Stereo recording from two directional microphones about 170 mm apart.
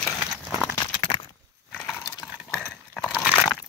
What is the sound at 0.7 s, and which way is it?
Horse, 25° left (ahead or behind).